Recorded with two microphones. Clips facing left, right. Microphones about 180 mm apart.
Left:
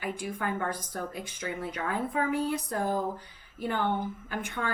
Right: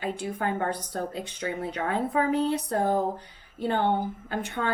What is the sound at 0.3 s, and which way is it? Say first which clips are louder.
A woman's voice: right 4 dB; 30° right (ahead or behind).